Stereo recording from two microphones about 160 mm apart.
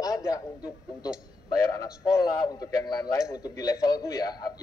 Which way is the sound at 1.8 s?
25° left (ahead or behind).